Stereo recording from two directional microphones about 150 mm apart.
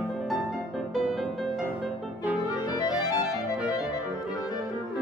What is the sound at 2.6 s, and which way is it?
Music, 25° left (ahead or behind).